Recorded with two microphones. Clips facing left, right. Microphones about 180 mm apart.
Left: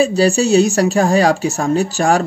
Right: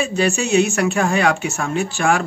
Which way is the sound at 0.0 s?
35° left (ahead or behind).